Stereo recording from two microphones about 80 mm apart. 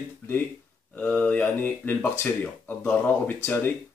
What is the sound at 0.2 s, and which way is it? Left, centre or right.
Speech, left.